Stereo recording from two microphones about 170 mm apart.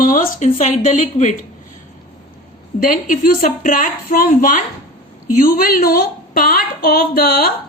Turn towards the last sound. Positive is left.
turn(degrees=65)  # may be behind; listen again after turning